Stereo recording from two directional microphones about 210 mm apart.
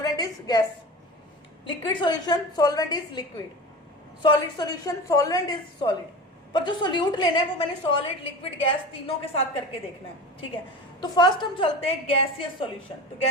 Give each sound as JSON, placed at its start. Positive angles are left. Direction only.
{"t": 0.0, "sound": "a sound", "side_deg": 20}
{"t": 1.6, "sound": "a woman's voice", "side_deg": 20}
{"t": 11.0, "sound": "a woman's voice", "side_deg": 20}